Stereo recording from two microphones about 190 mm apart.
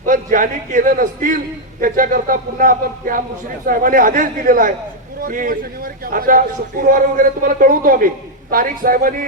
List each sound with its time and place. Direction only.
0.0 s a man's voice: 45° right (ahead or behind)